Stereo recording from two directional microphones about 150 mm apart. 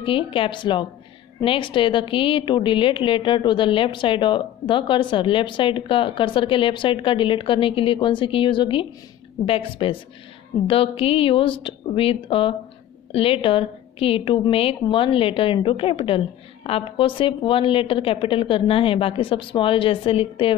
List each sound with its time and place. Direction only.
0.0 s a woman's voice: 35° left (ahead or behind)